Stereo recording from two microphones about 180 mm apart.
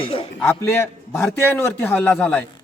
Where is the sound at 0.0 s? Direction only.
30° left (ahead or behind).